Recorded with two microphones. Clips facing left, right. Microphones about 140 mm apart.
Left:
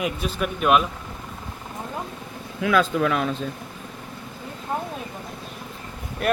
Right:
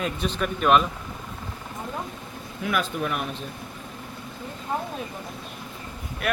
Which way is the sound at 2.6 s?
90° left.